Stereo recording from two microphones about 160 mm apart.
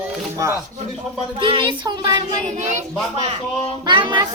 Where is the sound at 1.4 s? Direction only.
30° right (ahead or behind).